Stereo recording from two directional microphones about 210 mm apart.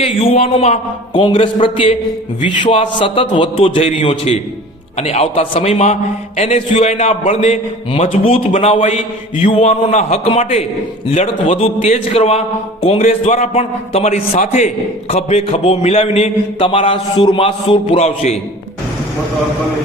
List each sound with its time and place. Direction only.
0.0 s a man's voice: 25° left (ahead or behind)